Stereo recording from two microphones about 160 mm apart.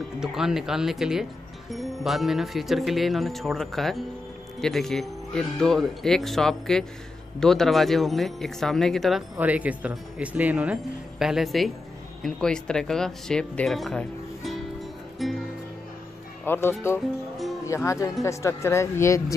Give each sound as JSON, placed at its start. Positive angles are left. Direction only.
{"t": 0.2, "sound": "speech", "side_deg": -5}
{"t": 9.4, "sound": "speech", "side_deg": -10}
{"t": 15.2, "sound": "music", "side_deg": 0}
{"t": 16.4, "sound": "speech", "side_deg": 15}